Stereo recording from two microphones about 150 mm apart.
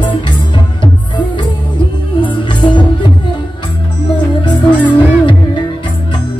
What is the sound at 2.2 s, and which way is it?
Music, 35° left (ahead or behind).